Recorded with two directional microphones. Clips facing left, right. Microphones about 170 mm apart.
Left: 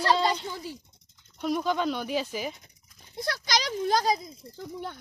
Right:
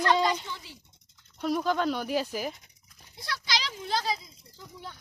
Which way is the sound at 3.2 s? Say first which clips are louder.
Left 4 dB; 45° left (ahead or behind).